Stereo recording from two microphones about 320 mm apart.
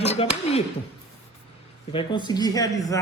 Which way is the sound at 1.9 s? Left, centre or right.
Centre.